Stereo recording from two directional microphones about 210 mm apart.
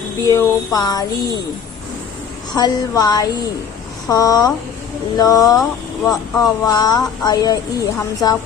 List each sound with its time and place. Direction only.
0.3 s speech: 15° left (ahead or behind)
2.6 s speech: 20° left (ahead or behind)